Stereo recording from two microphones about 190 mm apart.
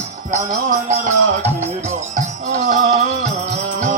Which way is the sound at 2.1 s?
40° right (ahead or behind).